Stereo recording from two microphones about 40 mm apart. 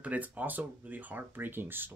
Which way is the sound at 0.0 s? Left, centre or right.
Right.